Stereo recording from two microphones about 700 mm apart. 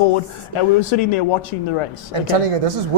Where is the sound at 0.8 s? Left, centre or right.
Left.